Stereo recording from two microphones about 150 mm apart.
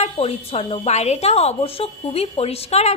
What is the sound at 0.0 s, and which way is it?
A woman's voice, 40° left (ahead or behind).